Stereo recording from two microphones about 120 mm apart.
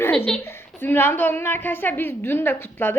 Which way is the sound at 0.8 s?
15° left (ahead or behind).